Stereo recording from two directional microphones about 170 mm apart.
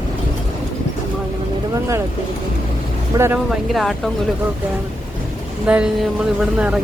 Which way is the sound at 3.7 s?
Centre (ahead or behind).